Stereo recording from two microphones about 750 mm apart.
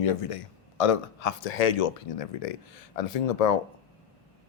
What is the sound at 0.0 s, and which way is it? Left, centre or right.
Speech, left.